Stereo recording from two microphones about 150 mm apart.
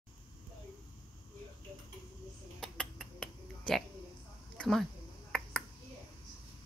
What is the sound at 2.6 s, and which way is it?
Finger snapping, 5° left (ahead or behind).